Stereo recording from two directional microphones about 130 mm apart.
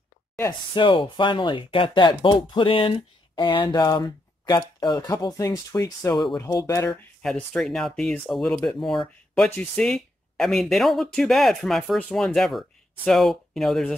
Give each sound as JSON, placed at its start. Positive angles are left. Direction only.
{"t": 0.7, "sound": "speech", "side_deg": 40}
{"t": 6.9, "sound": "speech", "side_deg": 5}
{"t": 12.3, "sound": "speech", "side_deg": 0}